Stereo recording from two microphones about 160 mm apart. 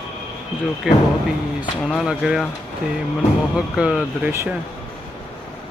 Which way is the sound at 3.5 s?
5° right (ahead or behind).